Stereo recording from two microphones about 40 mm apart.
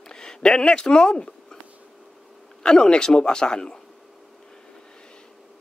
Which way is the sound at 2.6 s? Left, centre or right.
Left.